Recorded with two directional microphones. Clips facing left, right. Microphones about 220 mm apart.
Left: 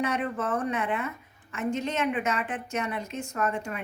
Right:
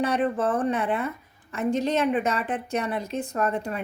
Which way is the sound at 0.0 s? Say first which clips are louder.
Right 5 dB; 35° right (ahead or behind).